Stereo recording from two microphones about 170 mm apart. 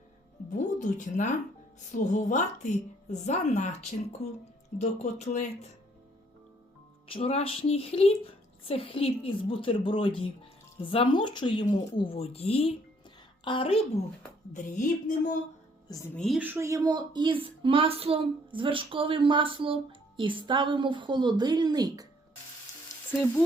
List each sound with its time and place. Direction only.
0.6 s a woman's voice: 45° left (ahead or behind)
7.1 s a woman's voice: 35° left (ahead or behind)
14.5 s a woman's voice: 50° left (ahead or behind)
16.1 s a woman's voice: centre (ahead or behind)
16.4 s a woman's voice: 15° right (ahead or behind)